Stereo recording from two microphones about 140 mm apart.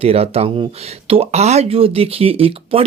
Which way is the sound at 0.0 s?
45° right (ahead or behind).